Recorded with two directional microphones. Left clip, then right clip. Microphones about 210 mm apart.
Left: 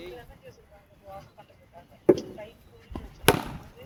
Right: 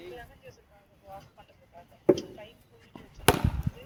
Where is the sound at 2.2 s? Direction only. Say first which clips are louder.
Left 2 dB; 45° right (ahead or behind).